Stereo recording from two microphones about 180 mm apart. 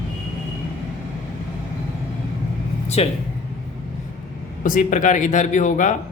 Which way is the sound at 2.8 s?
35° left (ahead or behind).